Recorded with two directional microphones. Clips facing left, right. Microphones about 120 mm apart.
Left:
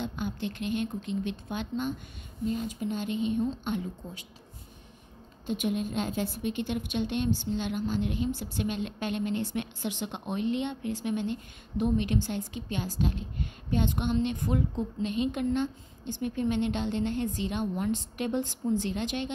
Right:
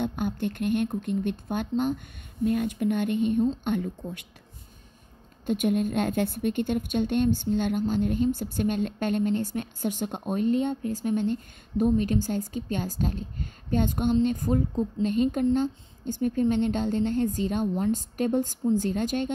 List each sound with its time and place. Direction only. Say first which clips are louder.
0.0 s a woman's voice: right 5 dB; 50° right (ahead or behind)
2.4 s a woman's voice: right 6 dB; 60° right (ahead or behind)
5.5 s a woman's voice: right 5 dB; 50° right (ahead or behind)